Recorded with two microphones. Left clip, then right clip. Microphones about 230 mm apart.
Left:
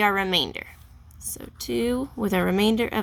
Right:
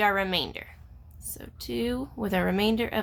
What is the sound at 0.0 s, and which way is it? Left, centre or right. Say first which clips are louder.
Speech: left 3 dB; left.